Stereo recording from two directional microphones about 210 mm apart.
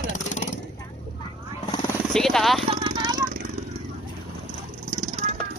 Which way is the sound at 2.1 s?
Centre (ahead or behind).